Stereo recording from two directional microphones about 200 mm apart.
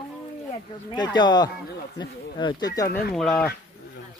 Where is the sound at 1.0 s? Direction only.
20° left (ahead or behind).